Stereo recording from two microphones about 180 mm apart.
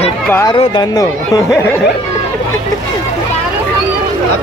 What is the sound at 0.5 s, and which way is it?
Speech, 25° left (ahead or behind).